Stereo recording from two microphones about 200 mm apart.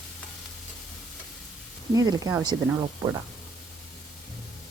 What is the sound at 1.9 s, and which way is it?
Speech, 20° right (ahead or behind).